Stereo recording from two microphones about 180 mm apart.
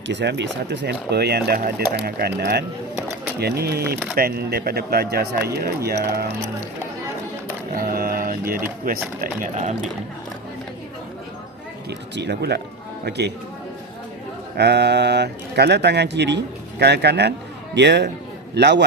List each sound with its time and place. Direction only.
0.1 s speech: 75° right (ahead or behind)
7.8 s mantra: 55° right (ahead or behind)
8.9 s speech: 55° right (ahead or behind)
9.2 s speech: 45° right (ahead or behind)
11.9 s speech: 70° right (ahead or behind)
14.5 s speech: 70° right (ahead or behind)